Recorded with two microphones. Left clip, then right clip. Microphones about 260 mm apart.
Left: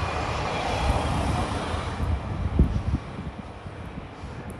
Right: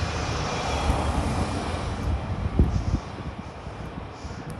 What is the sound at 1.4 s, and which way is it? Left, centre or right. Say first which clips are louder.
Vehicle: left 1 dB; centre.